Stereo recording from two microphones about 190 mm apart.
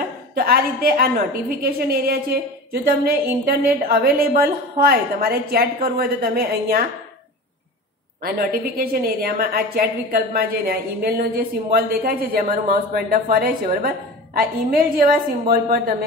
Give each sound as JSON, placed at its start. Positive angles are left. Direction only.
{"t": 0.3, "sound": "a woman's voice", "side_deg": -55}
{"t": 8.2, "sound": "a woman's voice", "side_deg": -50}